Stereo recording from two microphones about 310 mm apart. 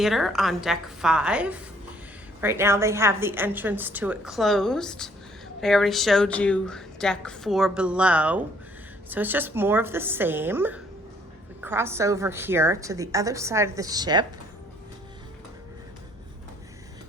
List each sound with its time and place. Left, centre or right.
0.0 s a woman's voice: centre